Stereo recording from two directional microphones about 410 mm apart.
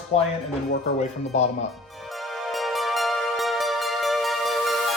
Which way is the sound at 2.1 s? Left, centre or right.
Centre.